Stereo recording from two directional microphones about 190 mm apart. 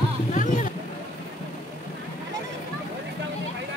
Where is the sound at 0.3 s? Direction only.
45° left (ahead or behind).